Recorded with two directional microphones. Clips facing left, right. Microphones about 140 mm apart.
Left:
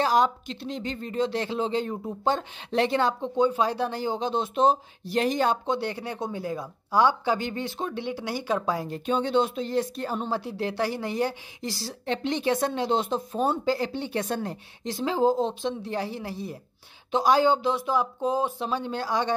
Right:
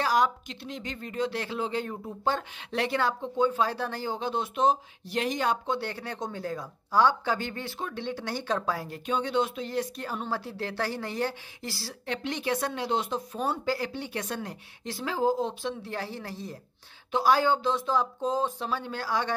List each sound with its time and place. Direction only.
0.0 s speech: 25° left (ahead or behind)
5.7 s speech: 15° left (ahead or behind)